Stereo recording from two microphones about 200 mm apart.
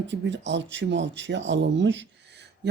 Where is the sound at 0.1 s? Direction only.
65° right (ahead or behind).